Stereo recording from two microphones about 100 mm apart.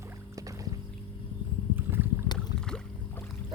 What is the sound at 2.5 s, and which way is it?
Boat, 10° left (ahead or behind).